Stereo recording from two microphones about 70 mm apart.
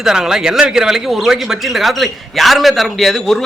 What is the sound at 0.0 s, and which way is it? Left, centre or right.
A man's voice, centre.